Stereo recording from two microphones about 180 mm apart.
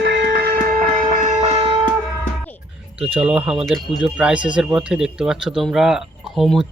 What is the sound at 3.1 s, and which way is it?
Speech, 10° right (ahead or behind).